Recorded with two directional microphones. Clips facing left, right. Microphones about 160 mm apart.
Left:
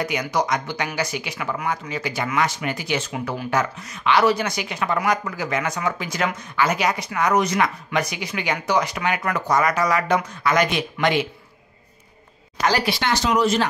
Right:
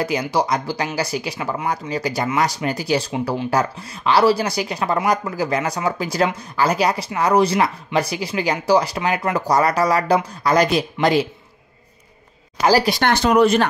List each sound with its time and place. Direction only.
0.0 s speech: 30° right (ahead or behind)
12.6 s speech: 40° right (ahead or behind)
13.0 s speech: 55° right (ahead or behind)